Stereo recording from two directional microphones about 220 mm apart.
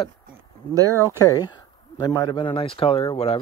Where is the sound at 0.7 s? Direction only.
15° right (ahead or behind).